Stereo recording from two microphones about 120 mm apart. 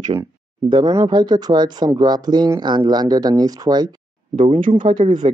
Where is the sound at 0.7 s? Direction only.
40° right (ahead or behind).